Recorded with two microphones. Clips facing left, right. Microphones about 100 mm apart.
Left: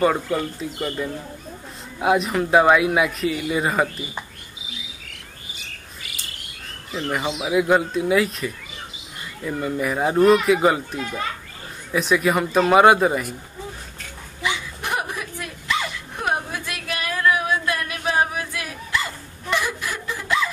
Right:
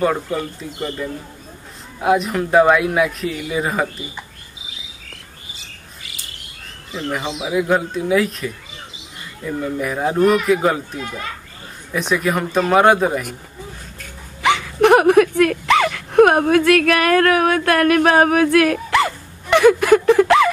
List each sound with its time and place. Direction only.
0.0 s speech: centre (ahead or behind)
2.0 s speech: centre (ahead or behind)
7.4 s speech: 5° left (ahead or behind)
14.4 s a sound: 70° right (ahead or behind)